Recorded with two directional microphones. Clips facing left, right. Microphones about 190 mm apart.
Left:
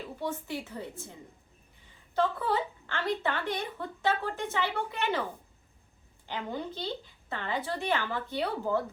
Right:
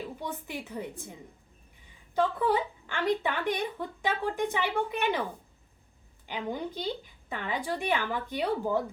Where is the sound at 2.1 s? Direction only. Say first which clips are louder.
Right 2 dB; 15° right (ahead or behind).